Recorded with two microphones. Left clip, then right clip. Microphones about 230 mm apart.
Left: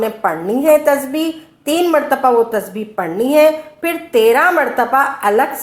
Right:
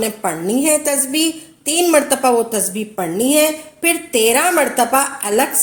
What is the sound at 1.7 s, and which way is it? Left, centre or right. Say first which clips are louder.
A woman's voice: left 1 dB; right.